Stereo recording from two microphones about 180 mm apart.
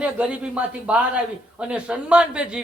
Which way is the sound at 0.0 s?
5° right (ahead or behind).